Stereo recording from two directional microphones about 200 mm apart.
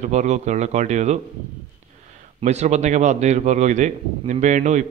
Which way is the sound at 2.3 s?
35° right (ahead or behind).